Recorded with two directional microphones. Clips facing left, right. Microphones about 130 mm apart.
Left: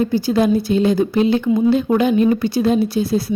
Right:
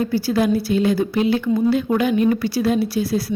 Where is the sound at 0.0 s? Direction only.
20° left (ahead or behind).